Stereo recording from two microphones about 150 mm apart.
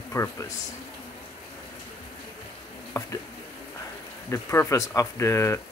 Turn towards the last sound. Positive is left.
turn(degrees=20)  # may be behind; listen again after turning